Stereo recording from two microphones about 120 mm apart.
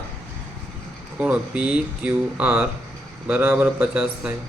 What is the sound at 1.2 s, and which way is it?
Speech, 10° right (ahead or behind).